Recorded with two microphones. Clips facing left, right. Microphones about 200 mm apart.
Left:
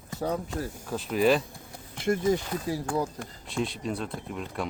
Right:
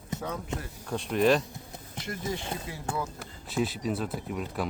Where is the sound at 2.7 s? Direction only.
40° left (ahead or behind).